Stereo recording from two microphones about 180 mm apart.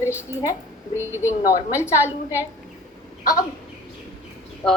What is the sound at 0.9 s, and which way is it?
A woman's voice, 15° left (ahead or behind).